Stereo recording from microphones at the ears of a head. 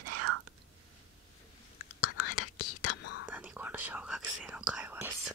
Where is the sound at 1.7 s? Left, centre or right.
Left.